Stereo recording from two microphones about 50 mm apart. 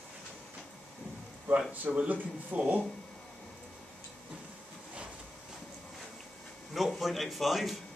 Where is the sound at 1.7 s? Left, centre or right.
Right.